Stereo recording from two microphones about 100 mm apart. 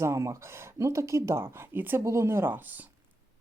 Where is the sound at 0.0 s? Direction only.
30° right (ahead or behind).